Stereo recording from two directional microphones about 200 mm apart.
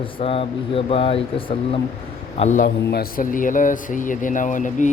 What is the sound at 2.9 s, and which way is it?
Speech, 50° left (ahead or behind).